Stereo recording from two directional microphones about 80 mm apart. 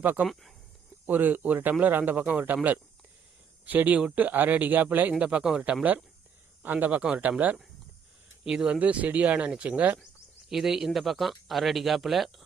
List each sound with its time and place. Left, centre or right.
0.0 s speech: right
3.7 s speech: centre
10.5 s speech: centre